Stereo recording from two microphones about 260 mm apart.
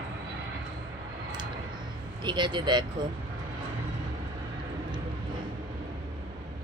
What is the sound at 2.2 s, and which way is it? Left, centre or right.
Speech, centre.